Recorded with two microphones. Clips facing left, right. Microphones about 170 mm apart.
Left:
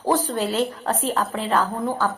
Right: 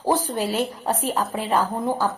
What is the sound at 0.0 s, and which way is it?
A woman's voice, 10° right (ahead or behind).